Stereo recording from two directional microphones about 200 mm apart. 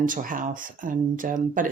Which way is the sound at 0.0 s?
40° right (ahead or behind).